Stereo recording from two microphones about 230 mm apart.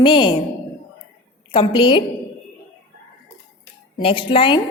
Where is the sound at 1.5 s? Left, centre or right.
Left.